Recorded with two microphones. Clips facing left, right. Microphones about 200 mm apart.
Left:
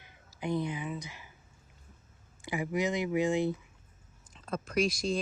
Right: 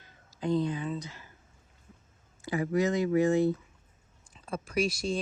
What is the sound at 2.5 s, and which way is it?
Speech, 15° left (ahead or behind).